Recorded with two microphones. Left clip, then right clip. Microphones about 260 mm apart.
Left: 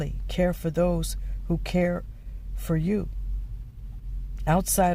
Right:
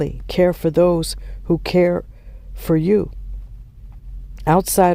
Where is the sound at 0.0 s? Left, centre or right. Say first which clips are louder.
Right 10 dB; right.